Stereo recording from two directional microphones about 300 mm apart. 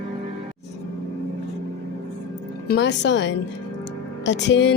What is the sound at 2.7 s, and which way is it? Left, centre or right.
Speech, left.